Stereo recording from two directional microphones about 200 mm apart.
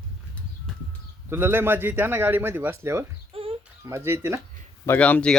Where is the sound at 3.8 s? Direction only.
15° right (ahead or behind).